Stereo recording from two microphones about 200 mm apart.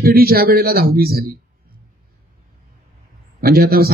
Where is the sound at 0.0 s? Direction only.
50° right (ahead or behind).